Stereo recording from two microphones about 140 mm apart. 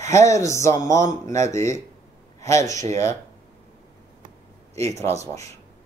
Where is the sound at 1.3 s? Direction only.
55° right (ahead or behind).